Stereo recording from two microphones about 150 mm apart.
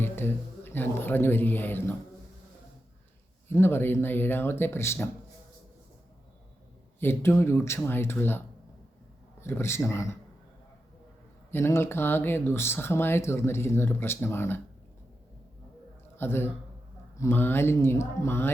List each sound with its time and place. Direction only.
0.0 s speech: 15° left (ahead or behind)
3.5 s speech: 15° left (ahead or behind)
7.0 s speech: 15° left (ahead or behind)
9.4 s speech: 15° left (ahead or behind)
11.5 s speech: 15° left (ahead or behind)
16.1 s a man's voice: 15° left (ahead or behind)